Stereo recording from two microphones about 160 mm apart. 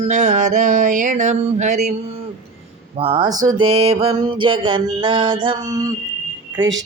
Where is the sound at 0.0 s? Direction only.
45° right (ahead or behind).